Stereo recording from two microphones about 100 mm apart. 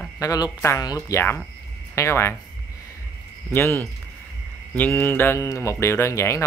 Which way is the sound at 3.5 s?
25° left (ahead or behind).